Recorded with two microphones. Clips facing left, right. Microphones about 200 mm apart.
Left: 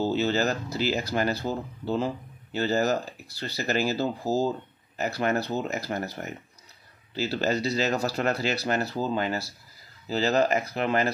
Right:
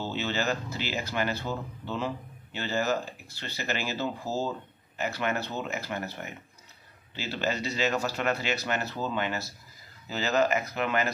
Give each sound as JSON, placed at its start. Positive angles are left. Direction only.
{"t": 0.0, "sound": "speech", "side_deg": 40}